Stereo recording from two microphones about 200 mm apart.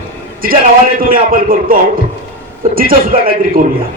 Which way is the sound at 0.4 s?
45° right (ahead or behind).